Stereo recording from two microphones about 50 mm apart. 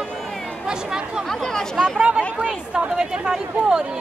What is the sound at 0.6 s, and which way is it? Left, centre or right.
Speech, centre.